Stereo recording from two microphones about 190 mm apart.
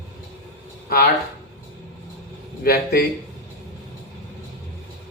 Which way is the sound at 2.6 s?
55° left (ahead or behind).